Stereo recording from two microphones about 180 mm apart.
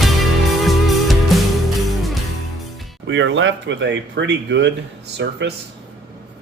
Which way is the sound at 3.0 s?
80° right.